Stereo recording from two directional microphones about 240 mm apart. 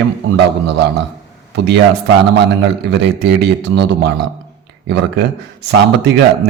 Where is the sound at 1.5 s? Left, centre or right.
Right.